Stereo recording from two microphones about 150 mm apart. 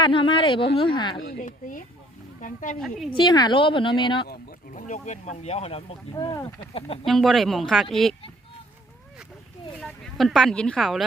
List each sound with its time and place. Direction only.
0.0 s speech: 35° left (ahead or behind)
1.2 s speech: 75° left (ahead or behind); by 2.7 s 60° left (ahead or behind)
3.2 s speech: 30° left (ahead or behind)
4.7 s speech: 55° left (ahead or behind)
6.1 s speech: 30° left (ahead or behind)
6.7 s speech: 40° left (ahead or behind)
7.0 s speech: centre (ahead or behind)
9.8 s speech: centre (ahead or behind)